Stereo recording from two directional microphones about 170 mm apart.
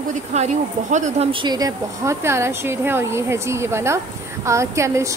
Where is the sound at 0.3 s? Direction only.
45° right (ahead or behind).